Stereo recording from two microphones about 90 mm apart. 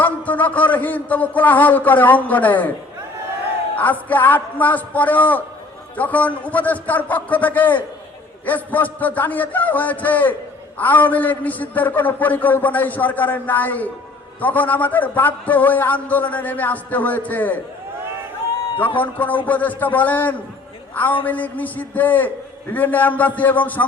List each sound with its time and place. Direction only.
0.0 s a man's voice: 20° left (ahead or behind)
3.8 s a man's voice: 20° left (ahead or behind)
18.9 s a man's voice: 20° left (ahead or behind)